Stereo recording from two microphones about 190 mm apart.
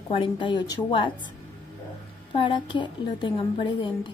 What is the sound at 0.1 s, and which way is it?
A woman's voice, 25° left (ahead or behind).